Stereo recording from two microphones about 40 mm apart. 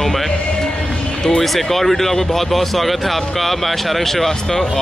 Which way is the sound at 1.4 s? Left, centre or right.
Centre.